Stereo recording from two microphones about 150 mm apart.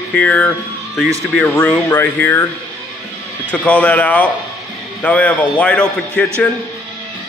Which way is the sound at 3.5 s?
10° left (ahead or behind).